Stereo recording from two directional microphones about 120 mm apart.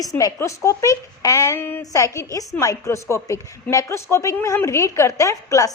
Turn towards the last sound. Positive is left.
turn(degrees=25)  # may be behind; listen again after turning